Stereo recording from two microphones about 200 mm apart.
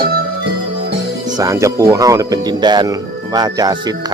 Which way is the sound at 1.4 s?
15° right (ahead or behind).